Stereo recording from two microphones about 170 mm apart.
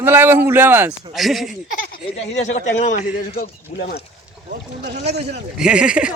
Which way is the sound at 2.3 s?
45° left (ahead or behind).